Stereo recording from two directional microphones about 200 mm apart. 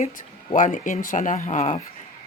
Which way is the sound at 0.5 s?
40° left (ahead or behind).